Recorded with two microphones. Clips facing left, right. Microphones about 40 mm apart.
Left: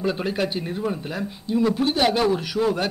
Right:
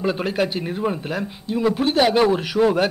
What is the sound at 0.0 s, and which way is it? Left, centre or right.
A man's voice, centre.